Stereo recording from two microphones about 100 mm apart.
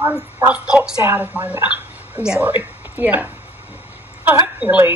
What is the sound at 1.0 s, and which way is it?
A woman's voice, 20° right (ahead or behind).